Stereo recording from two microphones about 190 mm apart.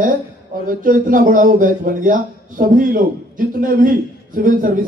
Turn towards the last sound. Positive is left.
turn(degrees=-45)  # may be behind; listen again after turning